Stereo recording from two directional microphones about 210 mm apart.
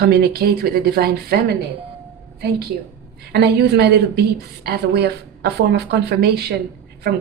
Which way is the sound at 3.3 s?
50° right (ahead or behind).